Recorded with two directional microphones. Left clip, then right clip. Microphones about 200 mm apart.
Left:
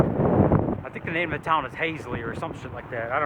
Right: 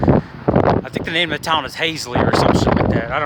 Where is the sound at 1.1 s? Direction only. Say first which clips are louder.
Right 6 dB; 50° right (ahead or behind).